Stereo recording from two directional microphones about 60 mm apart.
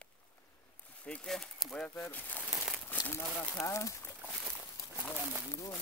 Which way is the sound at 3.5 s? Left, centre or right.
Left.